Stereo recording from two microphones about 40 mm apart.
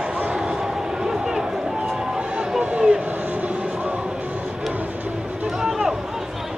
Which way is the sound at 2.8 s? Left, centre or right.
Right.